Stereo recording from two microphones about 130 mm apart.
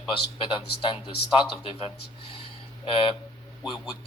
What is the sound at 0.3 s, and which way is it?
Speech, 40° left (ahead or behind).